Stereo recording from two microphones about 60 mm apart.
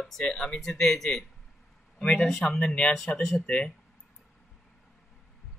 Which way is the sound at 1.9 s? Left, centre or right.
Left.